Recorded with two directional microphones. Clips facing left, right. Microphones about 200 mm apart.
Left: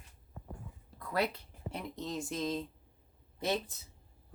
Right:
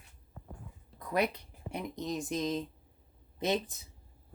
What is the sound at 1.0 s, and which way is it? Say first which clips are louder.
Speech: right 2 dB; 20° right (ahead or behind).